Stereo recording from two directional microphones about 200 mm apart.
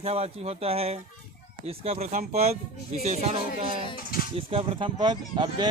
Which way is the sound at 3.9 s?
45° left (ahead or behind).